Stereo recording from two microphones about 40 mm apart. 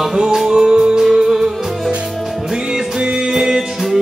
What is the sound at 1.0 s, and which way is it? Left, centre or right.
Music, centre.